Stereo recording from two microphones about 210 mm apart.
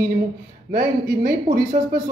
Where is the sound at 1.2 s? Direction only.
40° right (ahead or behind).